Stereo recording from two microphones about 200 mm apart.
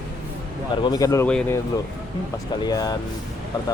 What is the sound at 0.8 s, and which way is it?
Speech, 20° left (ahead or behind).